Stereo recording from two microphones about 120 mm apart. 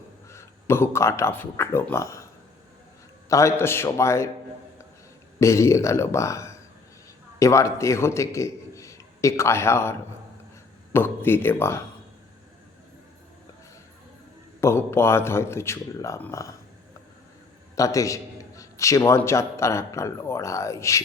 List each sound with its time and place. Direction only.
0.3 s speech: 20° left (ahead or behind)
3.2 s a man's voice: 25° left (ahead or behind)
5.4 s a man's voice: 25° left (ahead or behind)
10.9 s a man's voice: 20° left (ahead or behind)
14.6 s a man's voice: 20° left (ahead or behind)
17.7 s a man's voice: 25° left (ahead or behind)